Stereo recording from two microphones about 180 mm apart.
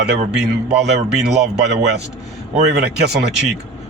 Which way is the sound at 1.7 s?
70° right (ahead or behind).